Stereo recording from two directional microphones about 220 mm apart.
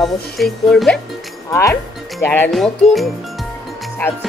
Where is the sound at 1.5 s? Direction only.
15° left (ahead or behind).